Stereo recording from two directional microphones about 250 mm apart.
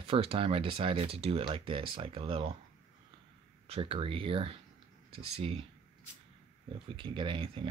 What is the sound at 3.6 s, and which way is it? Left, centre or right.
Speech, right.